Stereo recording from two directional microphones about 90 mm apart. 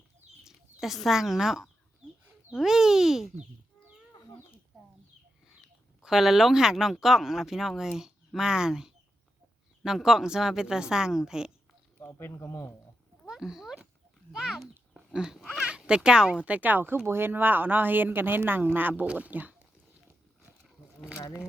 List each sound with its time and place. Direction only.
0.4 s bird: 5° right (ahead or behind)
1.0 s speech: 5° right (ahead or behind)
6.0 s a woman's voice: 5° right (ahead or behind)
11.9 s speech: 30° left (ahead or behind)
13.2 s cat: 5° right (ahead or behind)
14.3 s a sound: 5° right (ahead or behind)
15.5 s speech: 10° right (ahead or behind)
21.0 s speech: 35° left (ahead or behind)